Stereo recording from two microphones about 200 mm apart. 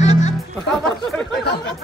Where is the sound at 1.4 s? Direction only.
55° left (ahead or behind).